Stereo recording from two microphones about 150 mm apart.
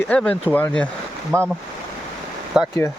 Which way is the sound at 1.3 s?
15° right (ahead or behind).